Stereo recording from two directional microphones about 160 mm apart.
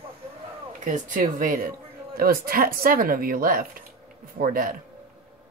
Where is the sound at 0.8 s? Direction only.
55° right (ahead or behind).